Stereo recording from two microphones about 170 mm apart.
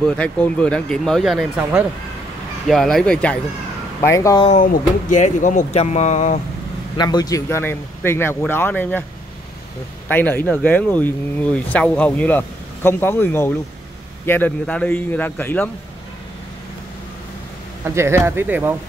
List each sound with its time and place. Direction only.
0.0 s speech: 5° left (ahead or behind)
2.7 s speech: centre (ahead or behind)
4.0 s speech: 20° left (ahead or behind)
4.6 s speech: 45° left (ahead or behind)
7.0 s speech: 25° left (ahead or behind)
10.0 s speech: 10° left (ahead or behind)
17.8 s speech: 15° right (ahead or behind)